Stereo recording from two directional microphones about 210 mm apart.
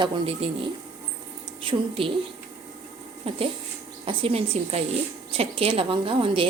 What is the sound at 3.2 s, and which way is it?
Speech, 25° right (ahead or behind).